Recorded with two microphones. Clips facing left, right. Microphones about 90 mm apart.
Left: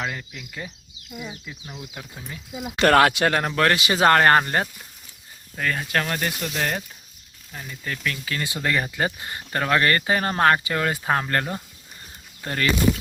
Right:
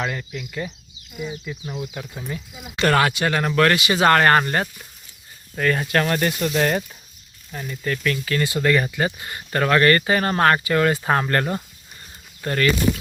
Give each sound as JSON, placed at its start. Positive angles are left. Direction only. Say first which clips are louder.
{"t": 0.0, "sound": "speech", "louder": "right 4 dB", "side_deg": 5}
{"t": 1.6, "sound": "speech", "louder": "right 9 dB", "side_deg": -20}
{"t": 2.1, "sound": "speech", "louder": "right 8 dB", "side_deg": 0}
{"t": 2.7, "sound": "speech", "louder": "left 2 dB", "side_deg": 55}
{"t": 3.4, "sound": "speech", "louder": "right 3 dB", "side_deg": 25}
{"t": 4.1, "sound": "speech", "louder": "right 1 dB", "side_deg": 20}
{"t": 5.5, "sound": "speech", "louder": "right 5 dB", "side_deg": 0}
{"t": 7.9, "sound": "speech", "louder": "right 6 dB", "side_deg": 10}
{"t": 9.6, "sound": "speech", "louder": "right 4 dB", "side_deg": 15}